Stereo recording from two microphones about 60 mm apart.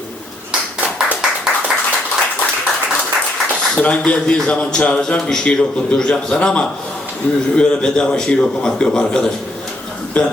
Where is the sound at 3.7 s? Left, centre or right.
Centre.